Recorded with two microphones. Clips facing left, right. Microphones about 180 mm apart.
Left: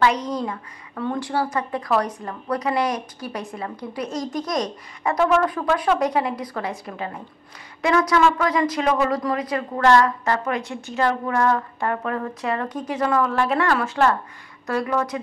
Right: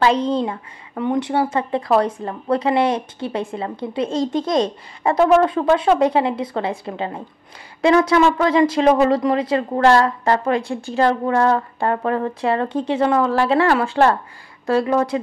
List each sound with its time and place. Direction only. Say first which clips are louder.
0.0 s a woman's voice: right 4 dB; 30° right (ahead or behind)